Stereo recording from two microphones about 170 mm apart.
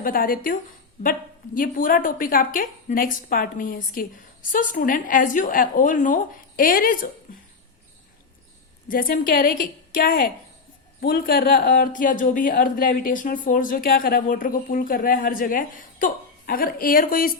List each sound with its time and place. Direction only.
0.0 s a woman's voice: 55° left (ahead or behind)
8.9 s a woman's voice: 60° left (ahead or behind)